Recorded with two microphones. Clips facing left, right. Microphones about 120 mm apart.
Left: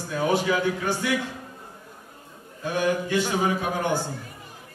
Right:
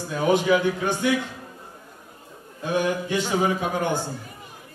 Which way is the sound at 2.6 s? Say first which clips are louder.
Right 1 dB; 20° right (ahead or behind).